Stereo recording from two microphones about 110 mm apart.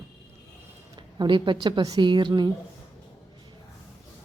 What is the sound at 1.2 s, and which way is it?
A woman's voice, 50° right (ahead or behind).